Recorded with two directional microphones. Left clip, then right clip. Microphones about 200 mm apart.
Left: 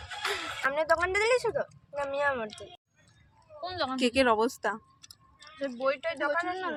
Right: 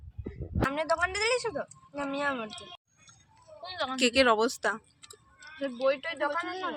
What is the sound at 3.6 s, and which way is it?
Speech, 5° left (ahead or behind).